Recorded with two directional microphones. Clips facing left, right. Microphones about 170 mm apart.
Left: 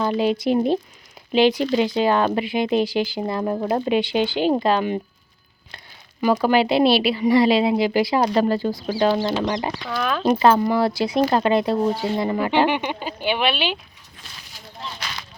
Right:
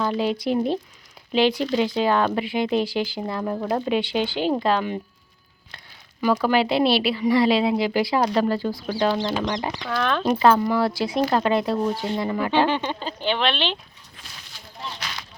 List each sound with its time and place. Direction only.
0.0 s speech: 15° left (ahead or behind)
3.7 s speech: 10° left (ahead or behind)
6.2 s speech: 15° left (ahead or behind)
10.5 s speech: 20° left (ahead or behind)